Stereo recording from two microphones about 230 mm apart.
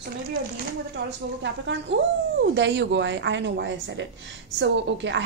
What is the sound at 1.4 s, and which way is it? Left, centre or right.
Speech, right.